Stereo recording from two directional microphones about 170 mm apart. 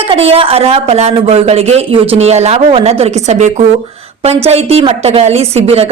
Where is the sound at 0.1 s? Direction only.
35° right (ahead or behind).